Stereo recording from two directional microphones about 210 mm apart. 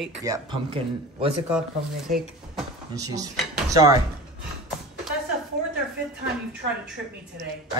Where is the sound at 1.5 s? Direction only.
Centre (ahead or behind).